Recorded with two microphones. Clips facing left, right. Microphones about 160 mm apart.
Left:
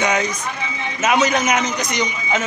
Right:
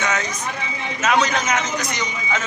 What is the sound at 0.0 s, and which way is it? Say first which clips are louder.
A man's voice: left 4 dB; 15° left (ahead or behind).